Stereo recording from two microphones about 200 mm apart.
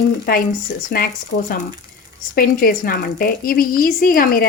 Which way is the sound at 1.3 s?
35° left (ahead or behind).